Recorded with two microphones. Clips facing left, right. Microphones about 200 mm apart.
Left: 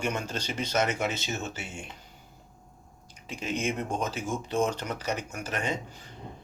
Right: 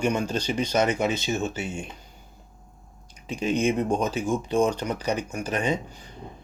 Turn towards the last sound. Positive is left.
turn(degrees=-15)  # may be behind; listen again after turning